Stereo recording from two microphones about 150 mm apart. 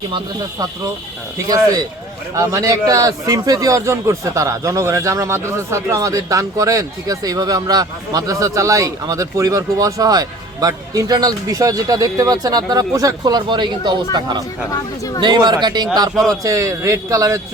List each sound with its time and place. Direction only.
1.5 s speech: 25° right (ahead or behind)
14.7 s speech: 25° left (ahead or behind)
15.2 s speech: 30° right (ahead or behind)